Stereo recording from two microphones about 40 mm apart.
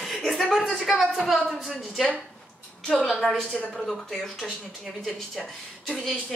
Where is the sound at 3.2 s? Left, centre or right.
Centre.